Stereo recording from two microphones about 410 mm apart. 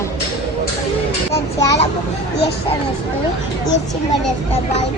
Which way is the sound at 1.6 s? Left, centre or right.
Centre.